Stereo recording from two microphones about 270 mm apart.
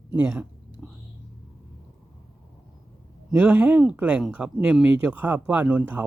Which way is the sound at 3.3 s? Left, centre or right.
Centre.